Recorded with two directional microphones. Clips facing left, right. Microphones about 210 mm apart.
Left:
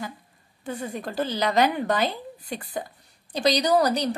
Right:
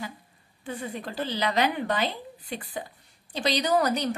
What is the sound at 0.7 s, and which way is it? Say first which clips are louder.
A woman's voice: left 3 dB; 45° left (ahead or behind).